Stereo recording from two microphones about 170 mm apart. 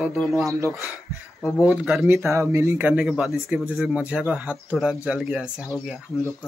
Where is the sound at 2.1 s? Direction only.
15° right (ahead or behind).